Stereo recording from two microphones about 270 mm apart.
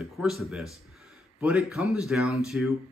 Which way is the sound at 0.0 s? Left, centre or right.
Centre.